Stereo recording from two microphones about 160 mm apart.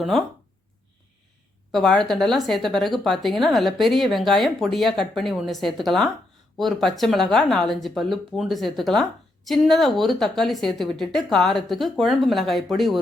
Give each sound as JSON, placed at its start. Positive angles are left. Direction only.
{"t": 1.7, "sound": "speech", "side_deg": 0}